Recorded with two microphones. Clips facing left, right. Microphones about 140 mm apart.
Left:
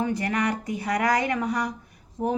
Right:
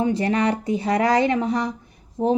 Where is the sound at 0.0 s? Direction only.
25° right (ahead or behind).